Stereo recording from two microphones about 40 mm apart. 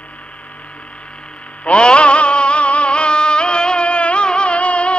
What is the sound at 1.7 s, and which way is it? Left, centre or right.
Music, left.